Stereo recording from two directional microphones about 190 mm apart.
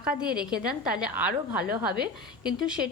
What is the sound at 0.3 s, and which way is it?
Speech, 5° right (ahead or behind).